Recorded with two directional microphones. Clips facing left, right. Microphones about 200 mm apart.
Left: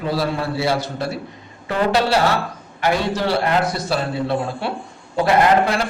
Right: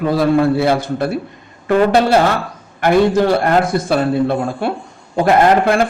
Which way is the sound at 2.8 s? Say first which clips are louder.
Right 8 dB; 50° right (ahead or behind).